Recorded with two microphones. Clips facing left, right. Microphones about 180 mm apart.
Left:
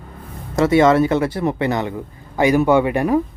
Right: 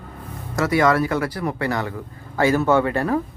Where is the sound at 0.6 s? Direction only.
25° left (ahead or behind).